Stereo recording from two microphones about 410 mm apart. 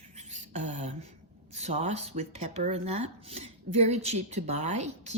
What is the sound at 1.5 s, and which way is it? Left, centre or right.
Speech, centre.